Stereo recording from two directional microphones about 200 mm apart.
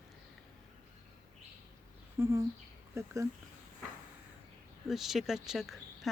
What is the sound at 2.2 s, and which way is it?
Speech, 15° right (ahead or behind).